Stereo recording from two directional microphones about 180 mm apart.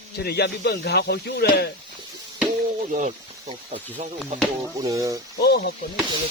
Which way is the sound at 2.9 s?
40° right (ahead or behind).